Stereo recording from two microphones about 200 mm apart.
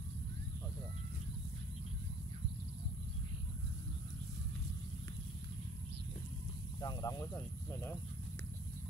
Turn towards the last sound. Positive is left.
turn(degrees=15)  # may be behind; listen again after turning